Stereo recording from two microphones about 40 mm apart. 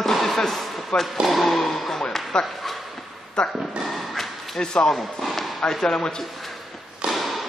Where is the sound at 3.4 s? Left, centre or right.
Left.